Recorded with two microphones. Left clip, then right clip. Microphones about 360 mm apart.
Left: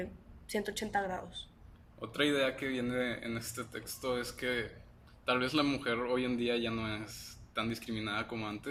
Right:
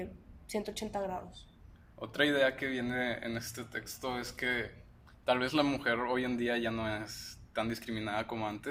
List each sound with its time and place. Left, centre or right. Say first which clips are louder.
0.0 s speech: left 1 dB; centre
2.0 s a man's voice: right 2 dB; centre